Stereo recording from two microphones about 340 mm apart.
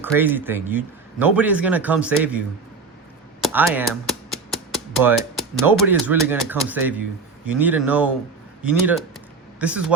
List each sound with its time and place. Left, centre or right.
0.0 s speech: centre
3.4 s speech: centre